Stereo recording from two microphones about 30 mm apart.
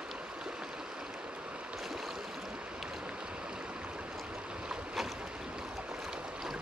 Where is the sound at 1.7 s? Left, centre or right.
Centre.